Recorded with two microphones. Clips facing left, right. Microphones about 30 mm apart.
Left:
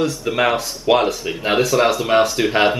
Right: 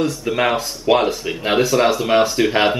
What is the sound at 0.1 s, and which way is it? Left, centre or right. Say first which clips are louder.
Speech: even; centre.